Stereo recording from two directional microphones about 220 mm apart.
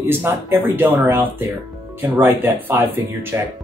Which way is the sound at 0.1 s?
10° right (ahead or behind).